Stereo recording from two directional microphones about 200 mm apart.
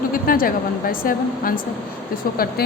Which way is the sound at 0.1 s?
45° left (ahead or behind).